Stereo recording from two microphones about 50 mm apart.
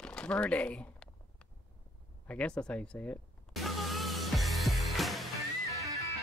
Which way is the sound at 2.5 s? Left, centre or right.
Left.